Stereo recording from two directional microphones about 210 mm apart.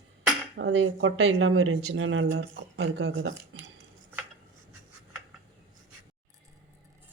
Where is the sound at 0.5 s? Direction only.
60° right (ahead or behind).